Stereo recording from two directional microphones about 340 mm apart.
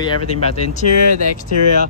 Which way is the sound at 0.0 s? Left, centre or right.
Centre.